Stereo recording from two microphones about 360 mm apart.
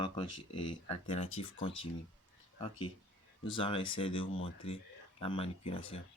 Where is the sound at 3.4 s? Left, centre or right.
Centre.